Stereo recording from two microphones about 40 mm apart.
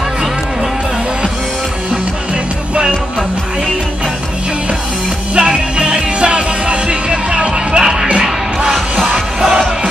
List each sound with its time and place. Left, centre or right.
5.4 s music: centre